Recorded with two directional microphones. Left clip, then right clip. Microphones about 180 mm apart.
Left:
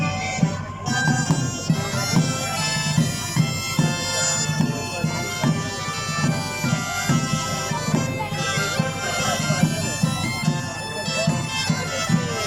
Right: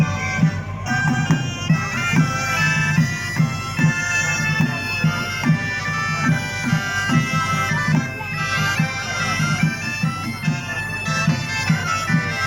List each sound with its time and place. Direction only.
1.6 s bagpipes: 20° left (ahead or behind)
6.2 s bagpipes: 15° left (ahead or behind)